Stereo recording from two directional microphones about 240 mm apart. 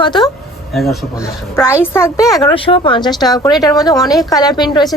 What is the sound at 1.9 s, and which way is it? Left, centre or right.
A woman's voice, centre.